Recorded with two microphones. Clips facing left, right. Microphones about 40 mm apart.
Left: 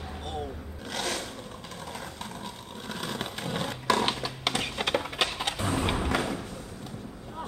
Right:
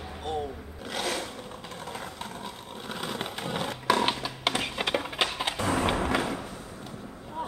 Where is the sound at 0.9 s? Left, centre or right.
Centre.